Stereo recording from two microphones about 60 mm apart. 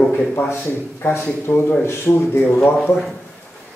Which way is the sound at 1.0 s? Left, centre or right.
Left.